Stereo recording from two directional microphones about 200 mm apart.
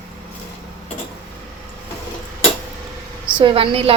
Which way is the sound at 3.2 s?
25° right (ahead or behind).